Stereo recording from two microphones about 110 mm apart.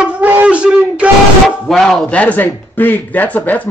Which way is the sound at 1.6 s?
Centre (ahead or behind).